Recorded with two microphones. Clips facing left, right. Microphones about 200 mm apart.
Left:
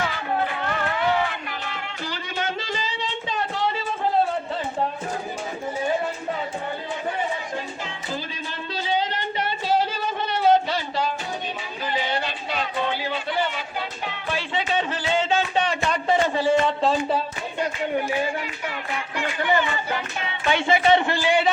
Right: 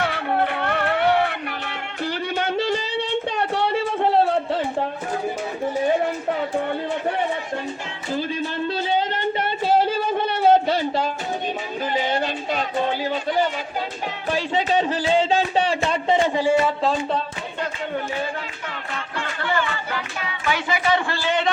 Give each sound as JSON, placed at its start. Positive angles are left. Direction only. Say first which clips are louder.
{"t": 0.0, "sound": "music", "louder": "right 3 dB", "side_deg": -60}
{"t": 8.9, "sound": "a sound", "louder": "left 1 dB", "side_deg": -50}
{"t": 11.9, "sound": "music", "louder": "right 4 dB", "side_deg": -45}
{"t": 17.6, "sound": "music", "louder": "left 3 dB", "side_deg": 15}